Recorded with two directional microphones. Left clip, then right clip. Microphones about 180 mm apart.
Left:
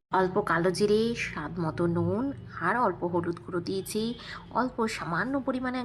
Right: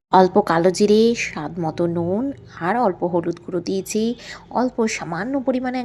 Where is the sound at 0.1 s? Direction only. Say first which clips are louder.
Right 11 dB; 30° right (ahead or behind).